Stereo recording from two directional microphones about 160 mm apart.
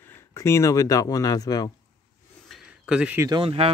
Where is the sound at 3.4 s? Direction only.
35° right (ahead or behind).